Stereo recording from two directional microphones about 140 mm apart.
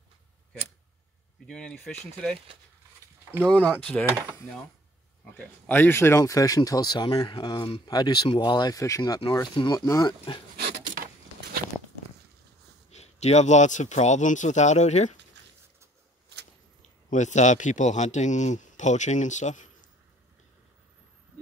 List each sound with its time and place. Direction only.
1.5 s speech: 5° left (ahead or behind)
3.4 s speech: 10° left (ahead or behind)
5.4 s speech: 15° left (ahead or behind)
12.9 s speech: 50° left (ahead or behind)
17.1 s speech: 60° left (ahead or behind)